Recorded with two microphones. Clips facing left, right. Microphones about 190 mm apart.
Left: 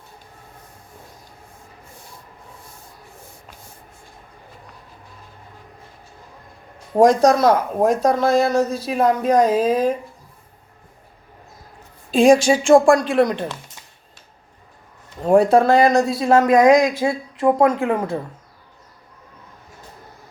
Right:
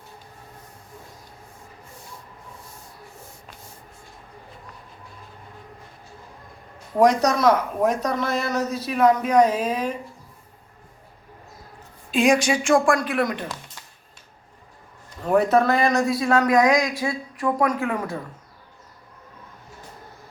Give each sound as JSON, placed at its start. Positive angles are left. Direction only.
{"t": 6.9, "sound": "speech", "side_deg": 30}
{"t": 12.1, "sound": "speech", "side_deg": 30}
{"t": 15.2, "sound": "speech", "side_deg": 30}